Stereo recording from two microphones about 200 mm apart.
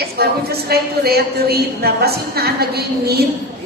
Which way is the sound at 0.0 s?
50° right (ahead or behind).